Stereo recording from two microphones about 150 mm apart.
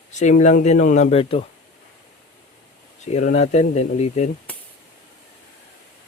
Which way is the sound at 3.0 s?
50° left (ahead or behind).